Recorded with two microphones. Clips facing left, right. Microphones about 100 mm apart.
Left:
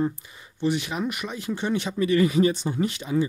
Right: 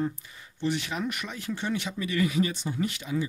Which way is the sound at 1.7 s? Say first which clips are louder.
Left 10 dB; 35° left (ahead or behind).